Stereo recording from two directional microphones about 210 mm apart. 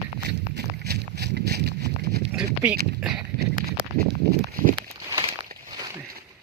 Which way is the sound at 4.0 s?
45° right (ahead or behind).